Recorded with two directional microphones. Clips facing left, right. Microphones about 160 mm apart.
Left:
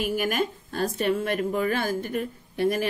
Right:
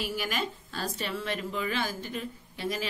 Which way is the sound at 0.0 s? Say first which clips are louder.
Left 7 dB; 50° left (ahead or behind).